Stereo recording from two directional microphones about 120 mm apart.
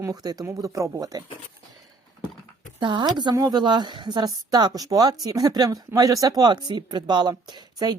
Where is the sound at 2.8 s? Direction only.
40° right (ahead or behind).